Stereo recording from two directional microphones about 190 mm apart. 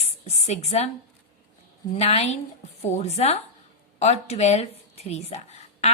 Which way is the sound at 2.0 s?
35° left (ahead or behind).